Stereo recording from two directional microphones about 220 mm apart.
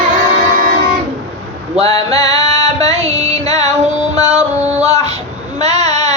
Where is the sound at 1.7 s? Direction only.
30° right (ahead or behind).